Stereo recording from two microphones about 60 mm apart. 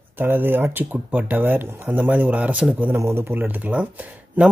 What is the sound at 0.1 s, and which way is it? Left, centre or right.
Speech, right.